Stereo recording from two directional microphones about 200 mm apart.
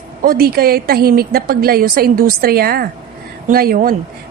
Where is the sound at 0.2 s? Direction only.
45° right (ahead or behind).